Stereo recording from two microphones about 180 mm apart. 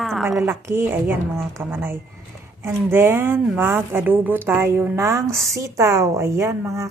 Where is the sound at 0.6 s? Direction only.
15° right (ahead or behind).